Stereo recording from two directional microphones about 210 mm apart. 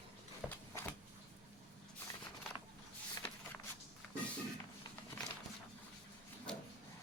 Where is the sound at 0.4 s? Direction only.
Centre (ahead or behind).